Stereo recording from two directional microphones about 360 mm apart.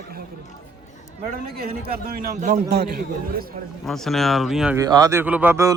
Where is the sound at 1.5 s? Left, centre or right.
Right.